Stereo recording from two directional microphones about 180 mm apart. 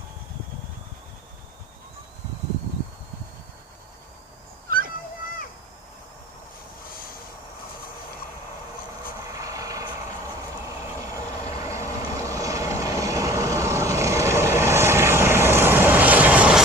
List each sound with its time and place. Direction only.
9.3 s vehicle: 20° right (ahead or behind)
11.6 s vehicle: 15° right (ahead or behind)